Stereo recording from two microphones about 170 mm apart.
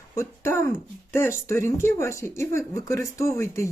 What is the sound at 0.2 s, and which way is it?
Speech, 15° left (ahead or behind).